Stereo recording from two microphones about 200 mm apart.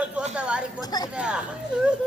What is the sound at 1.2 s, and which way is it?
Speech, 5° right (ahead or behind).